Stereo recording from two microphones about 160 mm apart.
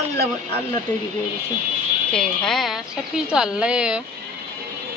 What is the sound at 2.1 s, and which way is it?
A woman's voice, 5° left (ahead or behind).